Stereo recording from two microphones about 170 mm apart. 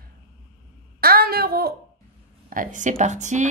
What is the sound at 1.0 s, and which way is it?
Speech, 60° right (ahead or behind).